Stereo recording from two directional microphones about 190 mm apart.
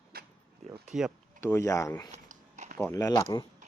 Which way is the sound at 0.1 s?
55° right (ahead or behind).